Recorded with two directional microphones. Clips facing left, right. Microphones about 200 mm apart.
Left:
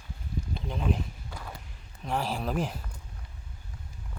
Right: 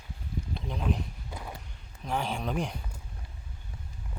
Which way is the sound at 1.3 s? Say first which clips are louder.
Right 2 dB; 20° right (ahead or behind).